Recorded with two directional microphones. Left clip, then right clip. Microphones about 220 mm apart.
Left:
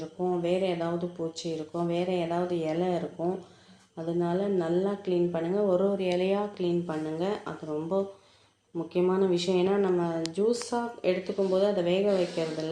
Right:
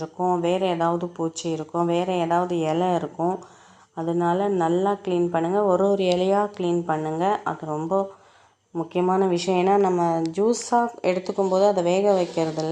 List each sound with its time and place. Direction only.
0.2 s a woman's voice: 40° right (ahead or behind)